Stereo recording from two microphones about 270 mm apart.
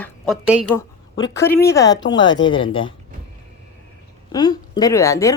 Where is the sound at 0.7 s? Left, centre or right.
Centre.